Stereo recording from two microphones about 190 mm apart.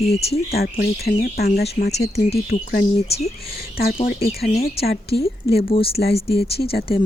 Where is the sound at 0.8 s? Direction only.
55° left (ahead or behind).